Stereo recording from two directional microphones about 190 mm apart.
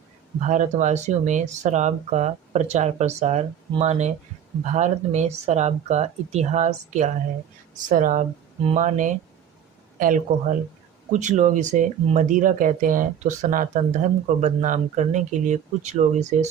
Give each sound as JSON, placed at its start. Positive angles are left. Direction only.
{"t": 0.4, "sound": "speech", "side_deg": -40}